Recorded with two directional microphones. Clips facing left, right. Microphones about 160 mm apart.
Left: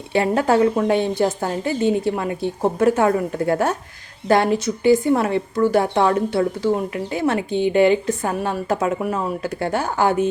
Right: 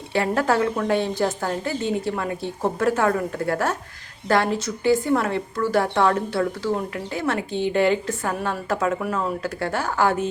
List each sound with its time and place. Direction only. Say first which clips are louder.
0.1 s speech: left 4 dB; 20° left (ahead or behind)